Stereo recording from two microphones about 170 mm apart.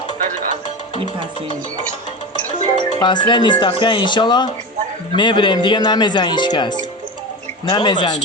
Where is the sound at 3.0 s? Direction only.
25° left (ahead or behind).